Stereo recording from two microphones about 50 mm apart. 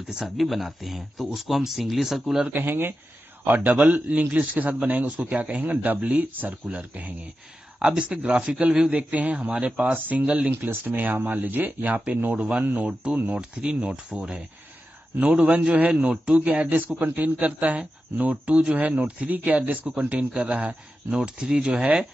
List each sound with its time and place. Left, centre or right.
0.1 s speech: centre
2.4 s a man's voice: right
7.8 s a man's voice: centre
10.7 s a man's voice: right
12.4 s a man's voice: right
15.4 s a man's voice: right
16.6 s a man's voice: right
21.1 s speech: centre